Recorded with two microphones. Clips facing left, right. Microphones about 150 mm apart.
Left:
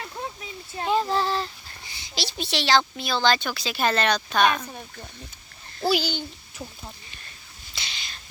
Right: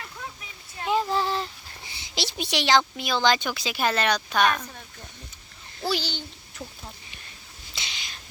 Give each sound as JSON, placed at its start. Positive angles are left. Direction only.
{"t": 0.8, "sound": "child singing", "side_deg": 25}
{"t": 1.1, "sound": "child singing", "side_deg": -15}
{"t": 2.0, "sound": "speech", "side_deg": -20}
{"t": 4.4, "sound": "a child's voice", "side_deg": 10}
{"t": 5.8, "sound": "a child's voice", "side_deg": 10}
{"t": 7.8, "sound": "a sound", "side_deg": -15}